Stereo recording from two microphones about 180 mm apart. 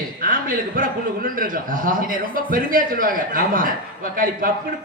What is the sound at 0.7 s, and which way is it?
A man's voice, 50° right (ahead or behind).